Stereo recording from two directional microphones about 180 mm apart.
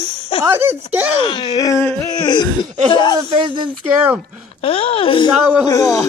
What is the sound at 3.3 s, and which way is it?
Speech, 25° right (ahead or behind).